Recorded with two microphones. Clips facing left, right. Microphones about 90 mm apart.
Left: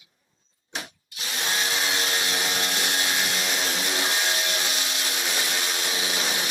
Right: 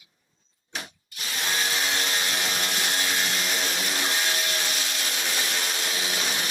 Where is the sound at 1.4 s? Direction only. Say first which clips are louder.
Even; 5° left (ahead or behind).